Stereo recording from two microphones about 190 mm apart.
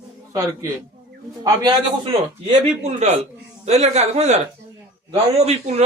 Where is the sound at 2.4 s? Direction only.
35° right (ahead or behind).